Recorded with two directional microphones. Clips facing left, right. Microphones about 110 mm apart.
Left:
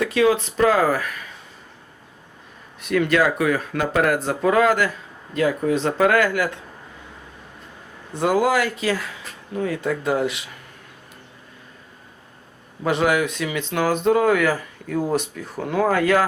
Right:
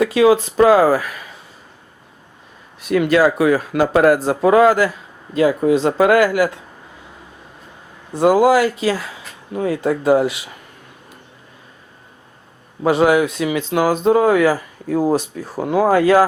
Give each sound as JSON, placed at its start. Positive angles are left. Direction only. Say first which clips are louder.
{"t": 0.0, "sound": "speech", "louder": "right 5 dB", "side_deg": -15}
{"t": 0.3, "sound": "speech", "louder": "right 8 dB", "side_deg": -30}
{"t": 2.9, "sound": "speech", "louder": "right 5 dB", "side_deg": -25}
{"t": 6.0, "sound": "speech", "louder": "right 4 dB", "side_deg": -30}
{"t": 8.1, "sound": "speech", "louder": "right 6 dB", "side_deg": -30}
{"t": 12.8, "sound": "speech", "louder": "right 6 dB", "side_deg": -25}
{"t": 13.7, "sound": "speech", "louder": "right 4 dB", "side_deg": -15}
{"t": 13.9, "sound": "speech", "louder": "right 3 dB", "side_deg": -30}